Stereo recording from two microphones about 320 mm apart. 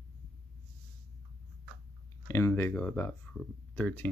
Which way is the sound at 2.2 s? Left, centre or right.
Centre.